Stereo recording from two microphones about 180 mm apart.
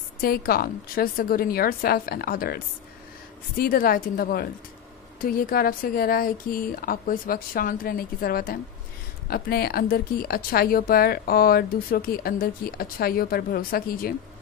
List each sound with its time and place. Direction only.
0.2 s speech: 55° left (ahead or behind)